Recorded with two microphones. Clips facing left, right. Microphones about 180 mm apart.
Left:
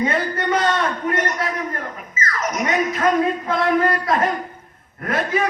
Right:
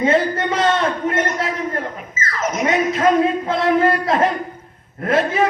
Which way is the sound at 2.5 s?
25° right (ahead or behind).